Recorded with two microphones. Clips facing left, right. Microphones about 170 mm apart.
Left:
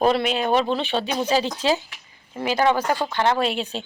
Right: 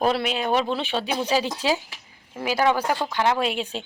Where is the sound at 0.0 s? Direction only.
5° right (ahead or behind).